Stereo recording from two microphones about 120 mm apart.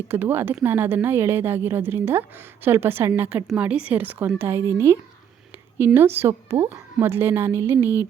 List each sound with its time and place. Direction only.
0.1 s a woman's voice: 15° right (ahead or behind)